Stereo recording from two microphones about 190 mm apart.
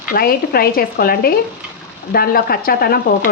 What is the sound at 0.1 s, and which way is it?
A woman's voice, 50° left (ahead or behind).